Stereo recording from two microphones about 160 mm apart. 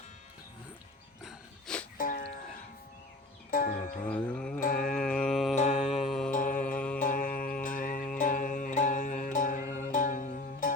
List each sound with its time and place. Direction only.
1.2 s a sound: centre (ahead or behind)
2.0 s music: 60° left (ahead or behind)
3.5 s music: 60° left (ahead or behind)
4.0 s music: 10° left (ahead or behind)
4.8 s mantra: 5° left (ahead or behind)
5.5 s mantra: 50° left (ahead or behind)
5.8 s mantra: centre (ahead or behind)
6.3 s mantra: 60° left (ahead or behind)
6.7 s mantra: 10° left (ahead or behind)
7.0 s music: 60° left (ahead or behind)